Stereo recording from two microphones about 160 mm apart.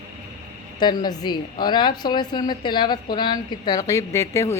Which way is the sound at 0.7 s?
25° left (ahead or behind).